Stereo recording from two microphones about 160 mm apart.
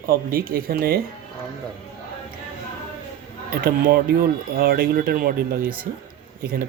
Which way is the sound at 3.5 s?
65° right (ahead or behind).